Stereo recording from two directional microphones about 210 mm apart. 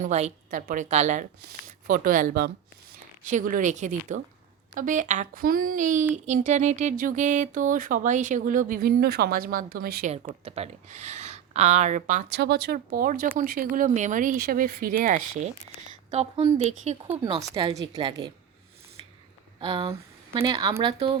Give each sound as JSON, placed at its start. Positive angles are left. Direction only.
{"t": 0.0, "sound": "speech", "side_deg": -35}
{"t": 10.1, "sound": "speech", "side_deg": -30}
{"t": 12.3, "sound": "speech", "side_deg": -55}
{"t": 16.0, "sound": "speech", "side_deg": -25}
{"t": 19.0, "sound": "a sound", "side_deg": -25}
{"t": 19.5, "sound": "speech", "side_deg": -25}